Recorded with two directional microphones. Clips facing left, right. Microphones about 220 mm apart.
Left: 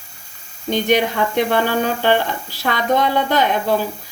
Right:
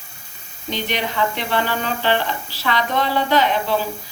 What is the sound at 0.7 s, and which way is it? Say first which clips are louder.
Speech: left 8 dB; 50° left (ahead or behind).